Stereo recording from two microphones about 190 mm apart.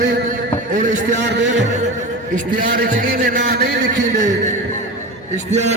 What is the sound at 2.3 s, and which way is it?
A man's voice, 45° right (ahead or behind).